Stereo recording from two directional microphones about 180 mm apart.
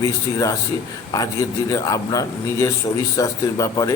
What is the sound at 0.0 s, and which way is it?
A man's voice, 15° left (ahead or behind).